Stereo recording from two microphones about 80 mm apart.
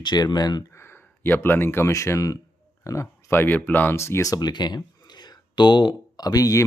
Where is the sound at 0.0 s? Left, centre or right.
Left.